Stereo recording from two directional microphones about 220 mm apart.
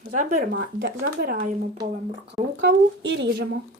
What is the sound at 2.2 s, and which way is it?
Speech, 50° right (ahead or behind).